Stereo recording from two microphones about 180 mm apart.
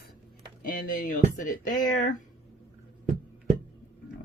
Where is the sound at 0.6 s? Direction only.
50° left (ahead or behind).